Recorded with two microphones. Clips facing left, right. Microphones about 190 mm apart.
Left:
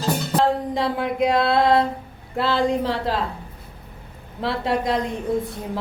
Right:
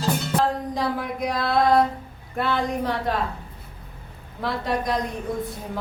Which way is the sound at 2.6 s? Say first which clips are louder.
Left 4 dB; 30° left (ahead or behind).